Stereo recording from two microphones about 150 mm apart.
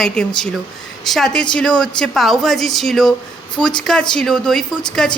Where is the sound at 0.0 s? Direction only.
5° left (ahead or behind).